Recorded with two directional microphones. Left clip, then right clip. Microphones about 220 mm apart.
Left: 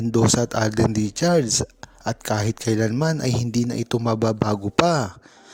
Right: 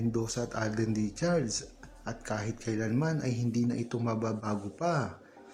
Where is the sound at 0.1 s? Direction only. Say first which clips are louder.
Left 14 dB; 40° left (ahead or behind).